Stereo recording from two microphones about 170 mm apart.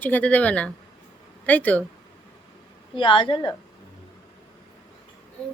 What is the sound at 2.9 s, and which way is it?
Speech, 30° left (ahead or behind).